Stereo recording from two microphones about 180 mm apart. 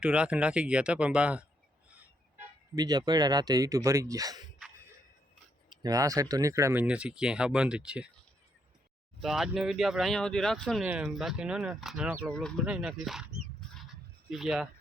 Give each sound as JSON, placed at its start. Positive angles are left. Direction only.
{"t": 0.0, "sound": "speech", "side_deg": -5}
{"t": 2.7, "sound": "speech", "side_deg": -20}
{"t": 5.6, "sound": "speech", "side_deg": -20}
{"t": 9.2, "sound": "speech", "side_deg": 0}